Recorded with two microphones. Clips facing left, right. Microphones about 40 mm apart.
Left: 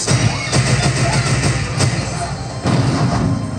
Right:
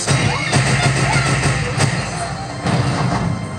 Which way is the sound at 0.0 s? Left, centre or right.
Right.